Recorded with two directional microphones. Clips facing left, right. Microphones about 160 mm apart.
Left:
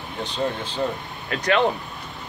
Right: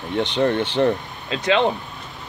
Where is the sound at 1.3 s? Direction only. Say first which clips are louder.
Right 2 dB; 20° right (ahead or behind).